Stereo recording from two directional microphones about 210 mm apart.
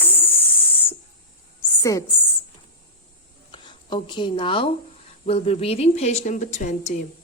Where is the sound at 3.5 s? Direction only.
20° left (ahead or behind).